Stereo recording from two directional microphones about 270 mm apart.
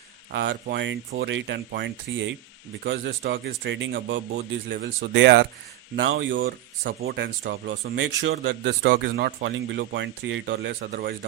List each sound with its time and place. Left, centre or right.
0.3 s speech: right